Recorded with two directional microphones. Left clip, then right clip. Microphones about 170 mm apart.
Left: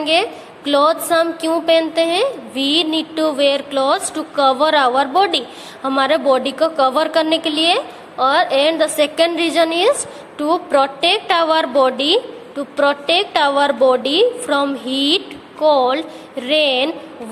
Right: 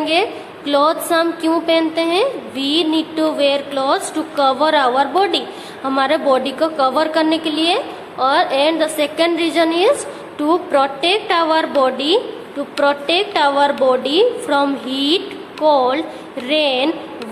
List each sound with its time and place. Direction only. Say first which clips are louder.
0.0 s a woman's voice: even; 40° left (ahead or behind)